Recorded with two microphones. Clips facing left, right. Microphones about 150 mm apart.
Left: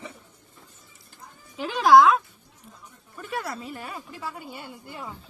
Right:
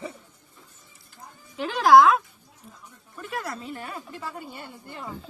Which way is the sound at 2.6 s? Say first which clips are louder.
Right 1 dB; centre (ahead or behind).